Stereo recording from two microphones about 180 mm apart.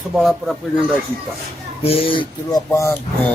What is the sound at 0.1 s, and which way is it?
Speech, centre (ahead or behind).